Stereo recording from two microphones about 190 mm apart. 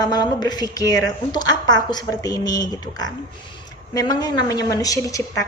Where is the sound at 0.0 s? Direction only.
20° left (ahead or behind).